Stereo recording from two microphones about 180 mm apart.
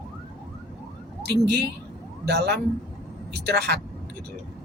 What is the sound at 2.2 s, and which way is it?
Speech, 65° right (ahead or behind).